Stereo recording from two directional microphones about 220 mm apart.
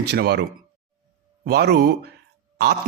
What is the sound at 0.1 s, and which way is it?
Speech, 50° right (ahead or behind).